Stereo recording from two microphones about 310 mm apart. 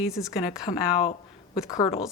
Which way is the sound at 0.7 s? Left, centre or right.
Centre.